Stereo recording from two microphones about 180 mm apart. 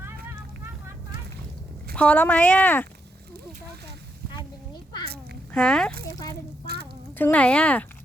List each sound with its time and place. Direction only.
2.0 s speech: 5° left (ahead or behind)
4.4 s a sound: 25° left (ahead or behind)
5.5 s speech: 5° left (ahead or behind)
7.2 s speech: 10° left (ahead or behind)